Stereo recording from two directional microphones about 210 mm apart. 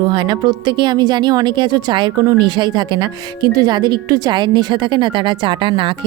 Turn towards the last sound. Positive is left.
turn(degrees=-25)  # may be behind; listen again after turning